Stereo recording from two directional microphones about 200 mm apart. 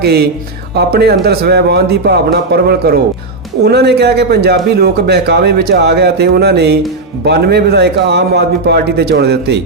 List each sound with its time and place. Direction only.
0.0 s a man's voice: 55° right (ahead or behind)